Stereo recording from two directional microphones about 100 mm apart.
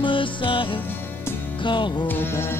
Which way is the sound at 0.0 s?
55° left (ahead or behind).